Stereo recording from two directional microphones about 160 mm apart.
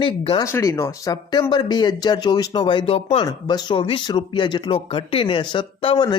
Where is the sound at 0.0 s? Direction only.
30° left (ahead or behind).